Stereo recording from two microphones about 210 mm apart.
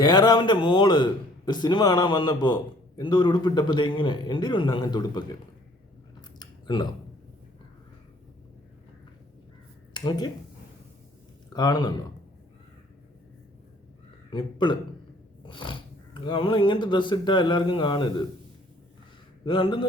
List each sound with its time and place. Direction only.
0.0 s a man's voice: 20° left (ahead or behind)
6.4 s typing: 20° left (ahead or behind)
9.9 s speech: 20° left (ahead or behind)
11.5 s a man's voice: 20° left (ahead or behind)
14.3 s a man's voice: 20° left (ahead or behind)
19.5 s a man's voice: 25° left (ahead or behind)